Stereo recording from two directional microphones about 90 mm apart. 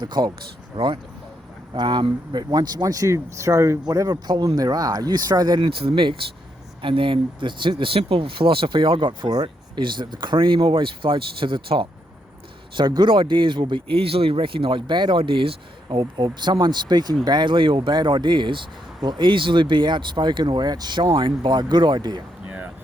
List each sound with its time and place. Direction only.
0.0 s speech: 55° right (ahead or behind)
0.7 s speech: 70° right (ahead or behind)
1.7 s speech: 55° right (ahead or behind)
5.5 s speech: 65° right (ahead or behind)
12.7 s speech: 55° right (ahead or behind)
15.2 s speech: 85° right; by 22.2 s 55° right (ahead or behind)
22.4 s music: 20° right (ahead or behind)